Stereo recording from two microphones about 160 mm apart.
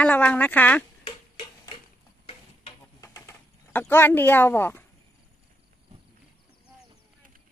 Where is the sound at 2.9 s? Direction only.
20° left (ahead or behind).